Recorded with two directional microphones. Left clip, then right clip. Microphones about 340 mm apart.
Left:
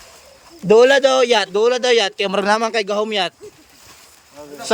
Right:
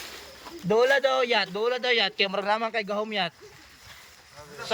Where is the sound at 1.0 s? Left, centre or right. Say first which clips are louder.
Left 9 dB; left.